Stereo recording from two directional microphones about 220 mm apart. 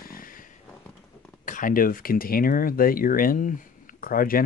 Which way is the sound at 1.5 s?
40° left (ahead or behind).